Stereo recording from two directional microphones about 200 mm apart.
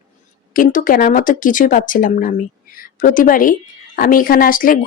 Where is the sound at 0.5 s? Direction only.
40° left (ahead or behind).